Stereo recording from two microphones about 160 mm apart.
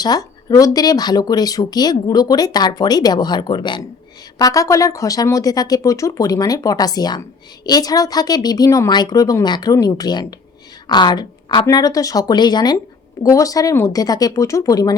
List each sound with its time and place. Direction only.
0.0 s speech: 25° left (ahead or behind)